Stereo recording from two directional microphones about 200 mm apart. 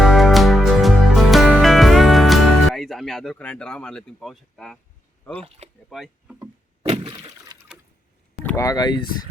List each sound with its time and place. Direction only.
0.0 s music: centre (ahead or behind)
5.2 s speech: 10° left (ahead or behind)
5.9 s speech: centre (ahead or behind)
6.8 s breaking: 25° right (ahead or behind)
8.4 s speech: 15° left (ahead or behind)